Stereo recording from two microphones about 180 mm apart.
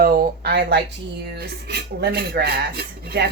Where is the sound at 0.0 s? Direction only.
55° right (ahead or behind).